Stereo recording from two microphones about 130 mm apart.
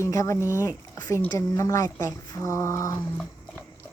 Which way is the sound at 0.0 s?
25° left (ahead or behind).